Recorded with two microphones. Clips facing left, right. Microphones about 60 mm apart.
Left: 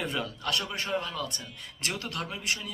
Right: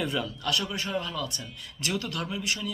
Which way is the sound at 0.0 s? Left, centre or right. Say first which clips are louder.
Right 2 dB; left.